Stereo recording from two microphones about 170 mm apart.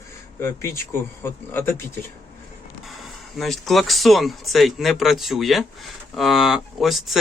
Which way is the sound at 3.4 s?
Centre (ahead or behind).